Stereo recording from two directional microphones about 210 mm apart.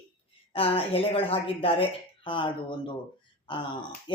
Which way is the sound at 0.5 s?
25° left (ahead or behind).